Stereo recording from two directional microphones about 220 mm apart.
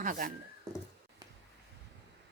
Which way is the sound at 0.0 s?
35° right (ahead or behind).